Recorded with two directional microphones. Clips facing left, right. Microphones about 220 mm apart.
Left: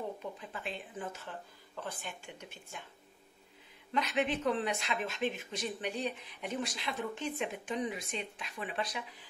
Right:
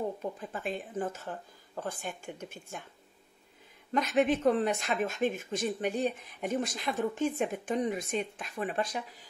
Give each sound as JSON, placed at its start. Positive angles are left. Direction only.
{"t": 0.2, "sound": "speech", "side_deg": -45}
{"t": 3.9, "sound": "speech", "side_deg": -45}